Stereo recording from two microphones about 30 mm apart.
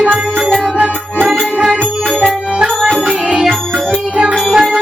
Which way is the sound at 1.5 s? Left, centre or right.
Centre.